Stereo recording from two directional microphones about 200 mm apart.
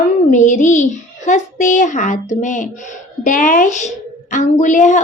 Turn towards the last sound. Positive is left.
turn(degrees=40)  # may be behind; listen again after turning